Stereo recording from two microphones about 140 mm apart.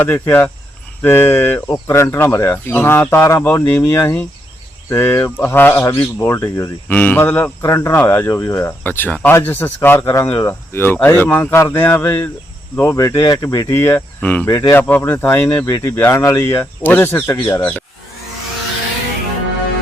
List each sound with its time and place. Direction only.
0.0 s speech: 15° left (ahead or behind)